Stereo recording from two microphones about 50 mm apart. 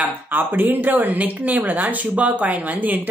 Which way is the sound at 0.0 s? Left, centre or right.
Right.